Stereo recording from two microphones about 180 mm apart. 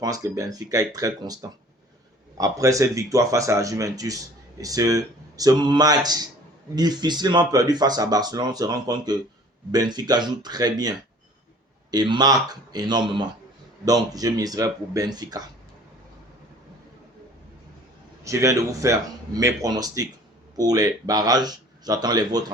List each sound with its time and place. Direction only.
0.0 s speech: 20° right (ahead or behind)
18.2 s speech: 15° right (ahead or behind)